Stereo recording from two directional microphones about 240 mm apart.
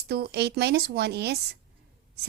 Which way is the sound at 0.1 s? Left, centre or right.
Right.